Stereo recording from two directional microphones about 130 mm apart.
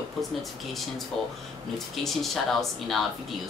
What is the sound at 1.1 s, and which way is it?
Speech, 5° left (ahead or behind).